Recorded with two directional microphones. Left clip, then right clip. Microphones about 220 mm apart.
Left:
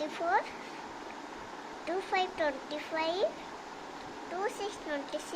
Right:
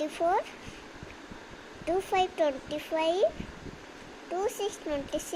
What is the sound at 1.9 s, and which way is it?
A child's voice, 50° right (ahead or behind).